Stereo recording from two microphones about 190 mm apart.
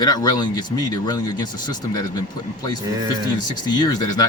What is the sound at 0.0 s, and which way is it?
Speech, 20° left (ahead or behind).